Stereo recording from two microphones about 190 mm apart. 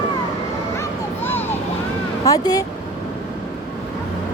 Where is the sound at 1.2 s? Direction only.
10° left (ahead or behind).